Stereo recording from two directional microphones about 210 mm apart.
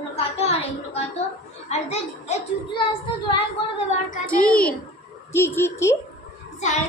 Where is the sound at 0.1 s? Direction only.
30° left (ahead or behind).